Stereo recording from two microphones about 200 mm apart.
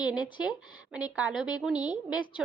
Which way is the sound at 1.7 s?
20° left (ahead or behind).